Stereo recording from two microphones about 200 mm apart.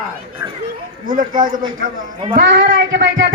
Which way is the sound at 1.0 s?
40° right (ahead or behind).